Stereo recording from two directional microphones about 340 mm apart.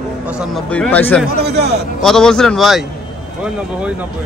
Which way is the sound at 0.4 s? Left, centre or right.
Centre.